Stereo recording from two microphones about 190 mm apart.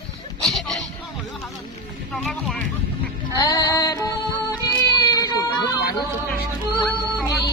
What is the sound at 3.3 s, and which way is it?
Music, 20° left (ahead or behind).